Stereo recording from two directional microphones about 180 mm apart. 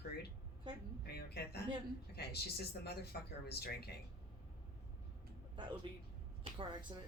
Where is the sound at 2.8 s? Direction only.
60° left (ahead or behind).